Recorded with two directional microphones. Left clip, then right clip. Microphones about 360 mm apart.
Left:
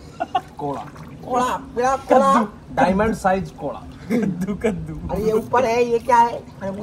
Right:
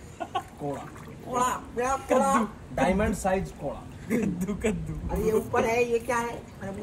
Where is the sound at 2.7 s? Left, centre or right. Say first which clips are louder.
Left 8 dB; centre.